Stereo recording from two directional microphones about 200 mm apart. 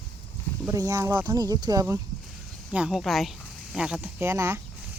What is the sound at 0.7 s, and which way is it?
Speech, 15° right (ahead or behind).